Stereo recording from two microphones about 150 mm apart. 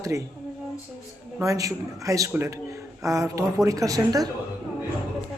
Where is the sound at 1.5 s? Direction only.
20° right (ahead or behind).